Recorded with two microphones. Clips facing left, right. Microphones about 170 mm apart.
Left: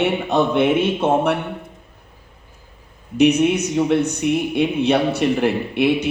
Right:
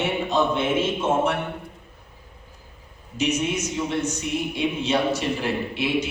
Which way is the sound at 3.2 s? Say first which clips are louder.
Left 9 dB; 60° left (ahead or behind).